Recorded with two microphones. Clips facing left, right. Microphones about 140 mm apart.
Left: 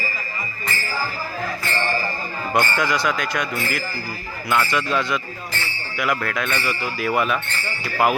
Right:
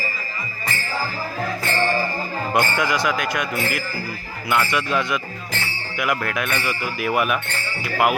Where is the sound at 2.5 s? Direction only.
20° right (ahead or behind).